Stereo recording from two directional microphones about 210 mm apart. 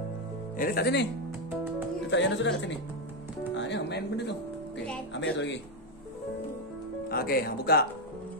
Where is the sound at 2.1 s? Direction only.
60° left (ahead or behind).